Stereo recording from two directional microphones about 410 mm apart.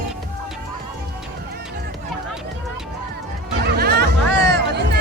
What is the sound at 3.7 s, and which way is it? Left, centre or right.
Music, right.